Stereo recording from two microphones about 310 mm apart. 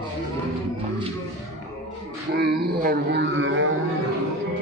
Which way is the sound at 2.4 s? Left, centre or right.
Right.